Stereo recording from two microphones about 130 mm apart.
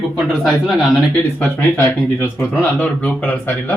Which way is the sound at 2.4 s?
5° left (ahead or behind).